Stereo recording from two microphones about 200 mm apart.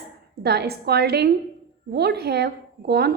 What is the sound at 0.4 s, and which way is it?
A woman's voice, 55° right (ahead or behind).